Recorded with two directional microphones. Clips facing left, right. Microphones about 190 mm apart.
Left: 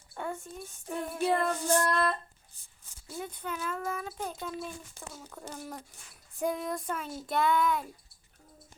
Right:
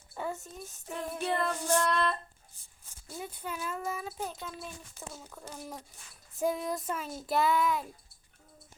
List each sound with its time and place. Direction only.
0.1 s a sound: centre (ahead or behind)
1.1 s female singing: 5° left (ahead or behind)
3.2 s speech: 5° right (ahead or behind)
5.1 s female singing: centre (ahead or behind)